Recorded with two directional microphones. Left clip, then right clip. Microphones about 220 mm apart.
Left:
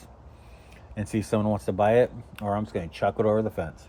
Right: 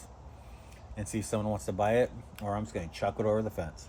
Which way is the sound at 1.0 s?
35° left (ahead or behind).